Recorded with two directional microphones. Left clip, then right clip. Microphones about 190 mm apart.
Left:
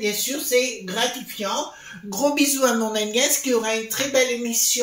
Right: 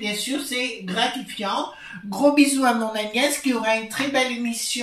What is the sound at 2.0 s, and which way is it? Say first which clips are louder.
Speech: right 3 dB; 50° left (ahead or behind).